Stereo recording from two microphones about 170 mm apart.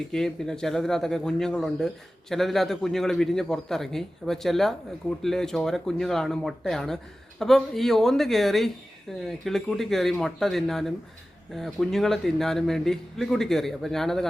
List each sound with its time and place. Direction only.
0.1 s a man's voice: 5° left (ahead or behind)